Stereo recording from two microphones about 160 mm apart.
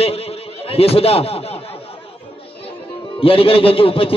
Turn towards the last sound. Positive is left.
turn(degrees=35)  # may be behind; listen again after turning